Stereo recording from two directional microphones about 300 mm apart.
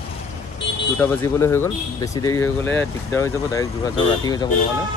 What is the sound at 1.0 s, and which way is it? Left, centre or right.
Speech, centre.